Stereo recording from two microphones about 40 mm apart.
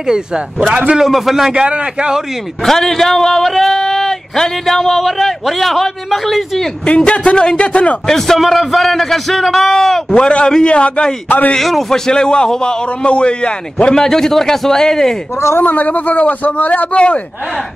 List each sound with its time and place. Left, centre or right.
0.6 s a man's voice: right
0.9 s a man's voice: centre
1.5 s a man's voice: right
2.6 s speech: centre
6.9 s a man's voice: left
8.4 s a man's voice: centre
10.1 s a man's voice: left
11.2 s a man's voice: left
11.9 s a man's voice: left
14.0 s speech: centre
15.6 s speech: left